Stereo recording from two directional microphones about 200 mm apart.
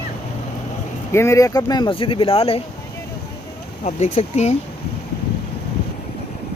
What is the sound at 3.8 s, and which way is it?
Speech, 35° left (ahead or behind).